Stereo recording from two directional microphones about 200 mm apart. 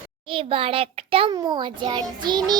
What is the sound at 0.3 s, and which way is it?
A child's voice, 25° right (ahead or behind).